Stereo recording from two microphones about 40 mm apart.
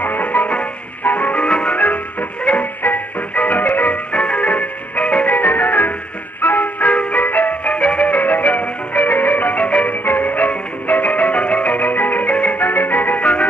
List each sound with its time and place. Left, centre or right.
0.0 s music: left
1.8 s music: left
4.1 s music: left
5.3 s music: left
12.5 s music: left